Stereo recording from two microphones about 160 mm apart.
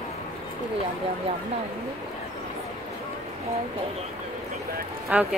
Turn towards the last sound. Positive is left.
turn(degrees=-10)  # may be behind; listen again after turning